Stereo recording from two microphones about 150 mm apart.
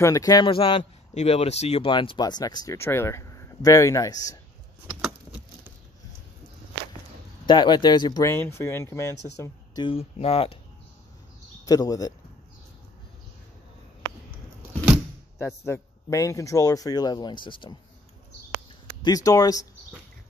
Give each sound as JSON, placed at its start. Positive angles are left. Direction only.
{"t": 0.0, "sound": "speech", "side_deg": 20}
{"t": 0.5, "sound": "speech", "side_deg": 35}
{"t": 7.4, "sound": "speech", "side_deg": 30}
{"t": 9.8, "sound": "speech", "side_deg": 40}
{"t": 11.6, "sound": "speech", "side_deg": 25}
{"t": 15.3, "sound": "speech", "side_deg": 20}
{"t": 19.0, "sound": "speech", "side_deg": 25}